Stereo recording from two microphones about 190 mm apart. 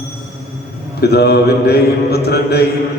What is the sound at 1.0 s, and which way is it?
Speech, 60° left (ahead or behind).